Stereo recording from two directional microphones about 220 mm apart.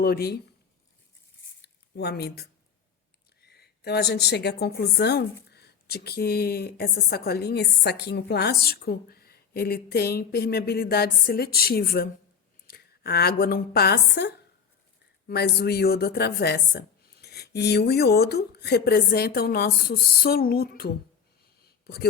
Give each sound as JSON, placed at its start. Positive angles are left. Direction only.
{"t": 0.0, "sound": "a woman's voice", "side_deg": 45}
{"t": 1.6, "sound": "a woman's voice", "side_deg": 45}
{"t": 21.6, "sound": "a sound", "side_deg": 45}